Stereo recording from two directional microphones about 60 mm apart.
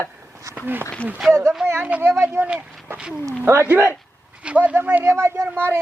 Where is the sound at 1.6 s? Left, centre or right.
Right.